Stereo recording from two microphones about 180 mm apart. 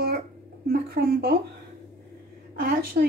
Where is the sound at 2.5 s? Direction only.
55° right (ahead or behind).